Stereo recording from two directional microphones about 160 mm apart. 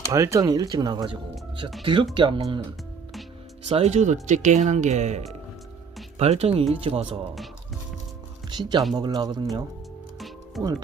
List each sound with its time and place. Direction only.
0.1 s speech: 20° right (ahead or behind)
3.7 s speech: 40° right (ahead or behind)
8.4 s speech: 30° right (ahead or behind)
10.2 s music: centre (ahead or behind)